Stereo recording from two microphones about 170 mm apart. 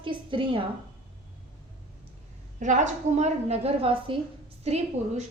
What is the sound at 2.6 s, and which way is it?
A woman's voice, 45° right (ahead or behind).